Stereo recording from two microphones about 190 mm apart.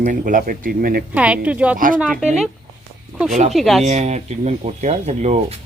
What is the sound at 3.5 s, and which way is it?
Speech, centre (ahead or behind).